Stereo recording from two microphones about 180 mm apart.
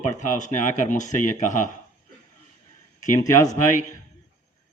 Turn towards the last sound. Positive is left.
turn(degrees=45)  # may be behind; listen again after turning